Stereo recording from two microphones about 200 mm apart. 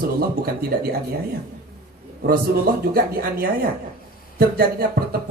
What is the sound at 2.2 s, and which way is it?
Speech, 50° right (ahead or behind).